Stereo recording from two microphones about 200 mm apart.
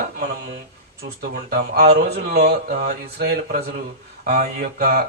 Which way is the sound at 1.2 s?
50° right (ahead or behind).